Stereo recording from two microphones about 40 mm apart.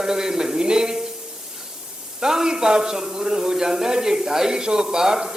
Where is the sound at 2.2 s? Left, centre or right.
Centre.